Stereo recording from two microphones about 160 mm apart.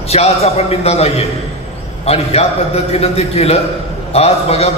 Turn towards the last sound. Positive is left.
turn(degrees=40)  # may be behind; listen again after turning